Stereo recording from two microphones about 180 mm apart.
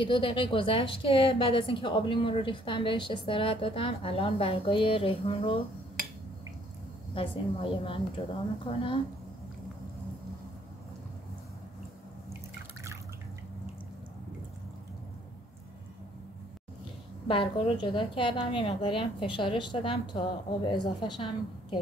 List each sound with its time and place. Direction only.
0.0 s a woman's voice: 30° left (ahead or behind)
7.2 s a woman's voice: 30° left (ahead or behind)
17.3 s a woman's voice: 30° left (ahead or behind)